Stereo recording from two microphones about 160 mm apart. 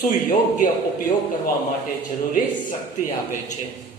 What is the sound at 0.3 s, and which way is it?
Speech, 55° left (ahead or behind).